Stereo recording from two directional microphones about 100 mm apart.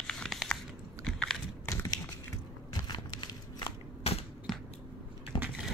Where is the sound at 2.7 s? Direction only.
45° left (ahead or behind).